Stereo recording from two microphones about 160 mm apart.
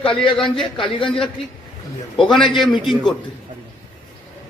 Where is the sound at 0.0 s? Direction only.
35° left (ahead or behind).